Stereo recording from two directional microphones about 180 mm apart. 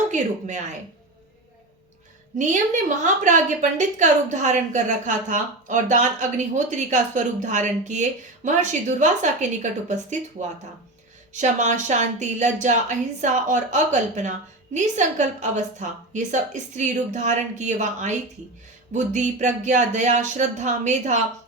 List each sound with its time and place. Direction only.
0.1 s speech: 40° right (ahead or behind)
2.4 s a woman's voice: 45° right (ahead or behind)
11.3 s a woman's voice: 40° right (ahead or behind)